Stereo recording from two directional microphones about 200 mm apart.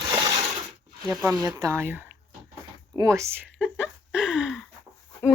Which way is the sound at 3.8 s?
5° right (ahead or behind).